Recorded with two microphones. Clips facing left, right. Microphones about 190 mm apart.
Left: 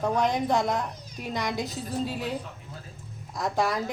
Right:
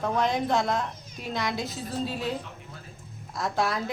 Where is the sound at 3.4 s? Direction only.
15° left (ahead or behind).